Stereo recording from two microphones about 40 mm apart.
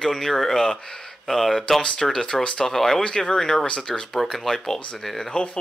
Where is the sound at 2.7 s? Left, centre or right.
Centre.